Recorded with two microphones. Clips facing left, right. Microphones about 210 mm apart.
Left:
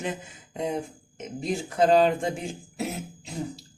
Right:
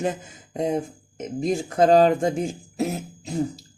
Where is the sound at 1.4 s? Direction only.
45° right (ahead or behind).